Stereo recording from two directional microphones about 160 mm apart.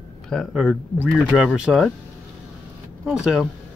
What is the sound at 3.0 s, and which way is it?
Speech, 5° right (ahead or behind).